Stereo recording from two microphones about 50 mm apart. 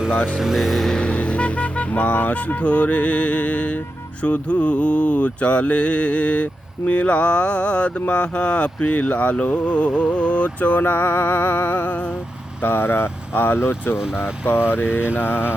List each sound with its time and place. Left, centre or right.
0.3 s speech: centre
1.0 s speech: left
4.2 s mantra: left
10.8 s music: left
12.6 s speech: left
14.2 s music: left